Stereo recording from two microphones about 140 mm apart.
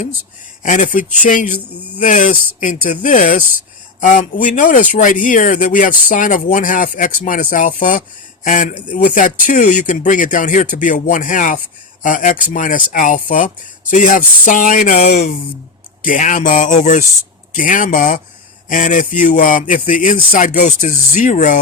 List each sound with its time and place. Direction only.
0.6 s speech: 65° left (ahead or behind)
16.0 s speech: 75° left (ahead or behind)